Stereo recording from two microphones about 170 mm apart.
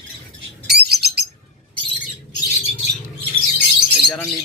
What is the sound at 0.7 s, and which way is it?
Bird, 70° right (ahead or behind).